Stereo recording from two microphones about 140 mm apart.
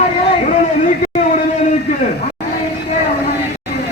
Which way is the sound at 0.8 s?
60° left (ahead or behind).